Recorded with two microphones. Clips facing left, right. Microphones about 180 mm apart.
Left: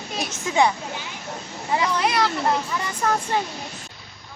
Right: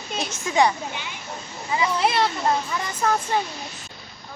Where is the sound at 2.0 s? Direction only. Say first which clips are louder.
Right 3 dB; 25° right (ahead or behind).